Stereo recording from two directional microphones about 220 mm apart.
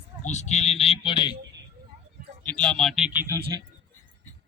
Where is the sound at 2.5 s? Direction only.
5° left (ahead or behind); by 3.4 s 15° right (ahead or behind).